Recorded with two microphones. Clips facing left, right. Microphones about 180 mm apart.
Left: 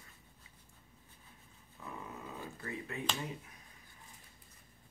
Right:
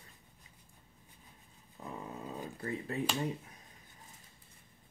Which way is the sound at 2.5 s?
35° right (ahead or behind).